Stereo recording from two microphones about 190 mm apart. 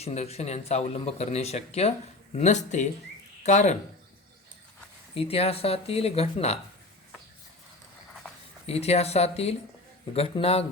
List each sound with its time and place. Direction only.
0.0 s a man's voice: 35° left (ahead or behind)
5.1 s a man's voice: 30° left (ahead or behind)
8.6 s a man's voice: 35° left (ahead or behind)